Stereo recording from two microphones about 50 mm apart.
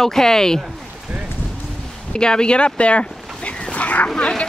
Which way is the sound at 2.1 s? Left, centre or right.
Centre.